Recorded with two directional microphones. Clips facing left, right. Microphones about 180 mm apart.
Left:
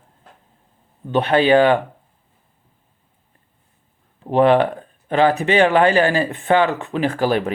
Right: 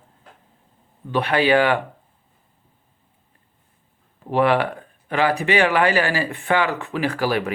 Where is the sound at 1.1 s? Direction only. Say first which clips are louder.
Left 4 dB; 25° left (ahead or behind).